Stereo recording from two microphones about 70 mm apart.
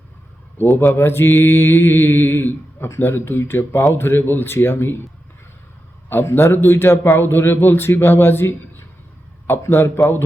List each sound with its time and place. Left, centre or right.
0.7 s mantra: left
6.1 s mantra: left